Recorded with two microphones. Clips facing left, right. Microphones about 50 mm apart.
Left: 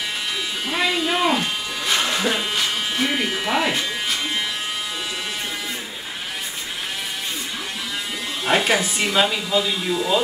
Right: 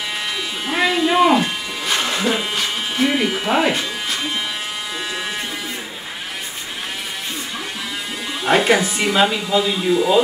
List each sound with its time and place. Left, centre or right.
0.7 s electric shaver: centre
8.5 s speech: centre